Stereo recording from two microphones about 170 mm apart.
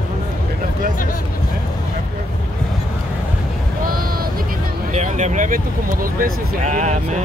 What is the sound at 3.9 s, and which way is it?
Vehicle, 60° right (ahead or behind).